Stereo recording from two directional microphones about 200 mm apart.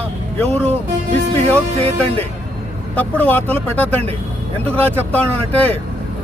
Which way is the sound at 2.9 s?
10° left (ahead or behind).